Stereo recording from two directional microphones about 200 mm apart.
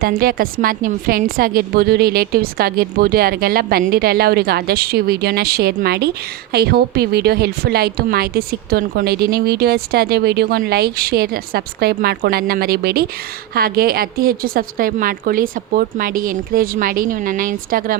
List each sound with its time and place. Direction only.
0.0 s a woman's voice: 45° right (ahead or behind)